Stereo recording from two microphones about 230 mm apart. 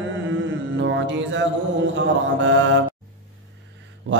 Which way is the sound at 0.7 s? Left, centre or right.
Right.